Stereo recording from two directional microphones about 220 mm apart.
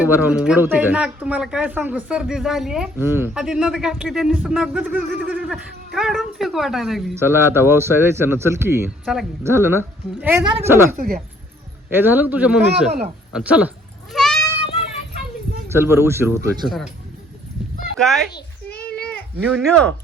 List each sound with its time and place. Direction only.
0.0 s speech: 5° right (ahead or behind)
10.4 s a woman's voice: 25° right (ahead or behind)
10.7 s speech: 10° right (ahead or behind)
10.9 s speech: 40° right (ahead or behind)
11.9 s speech: 10° right (ahead or behind)
14.1 s goat: centre (ahead or behind)
15.7 s speech: 10° right (ahead or behind)
16.6 s speech: centre (ahead or behind)
17.9 s speech: centre (ahead or behind)
18.7 s a sound: 45° left (ahead or behind)
19.5 s speech: centre (ahead or behind)